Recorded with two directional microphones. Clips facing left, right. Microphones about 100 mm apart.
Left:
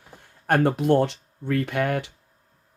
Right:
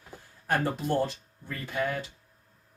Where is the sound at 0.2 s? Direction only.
60° left (ahead or behind).